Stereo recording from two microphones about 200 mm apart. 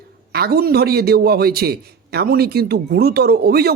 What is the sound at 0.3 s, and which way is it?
A man's voice, 50° right (ahead or behind).